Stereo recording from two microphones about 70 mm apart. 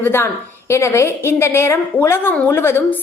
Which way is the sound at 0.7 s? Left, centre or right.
Left.